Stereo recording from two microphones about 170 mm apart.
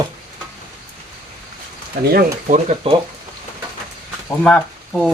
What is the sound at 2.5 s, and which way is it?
Speech, 40° right (ahead or behind).